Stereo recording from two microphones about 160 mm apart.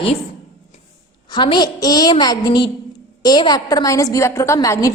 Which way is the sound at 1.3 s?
30° left (ahead or behind).